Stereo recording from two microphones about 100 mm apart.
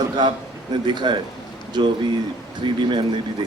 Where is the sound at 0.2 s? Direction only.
50° right (ahead or behind).